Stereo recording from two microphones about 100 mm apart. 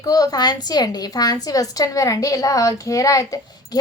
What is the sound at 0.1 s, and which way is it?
A woman's voice, 40° left (ahead or behind).